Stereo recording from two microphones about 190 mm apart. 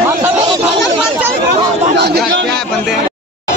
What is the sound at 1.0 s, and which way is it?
Chatter, 10° right (ahead or behind).